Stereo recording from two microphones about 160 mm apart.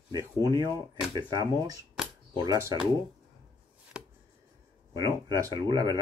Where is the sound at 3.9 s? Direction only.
5° right (ahead or behind).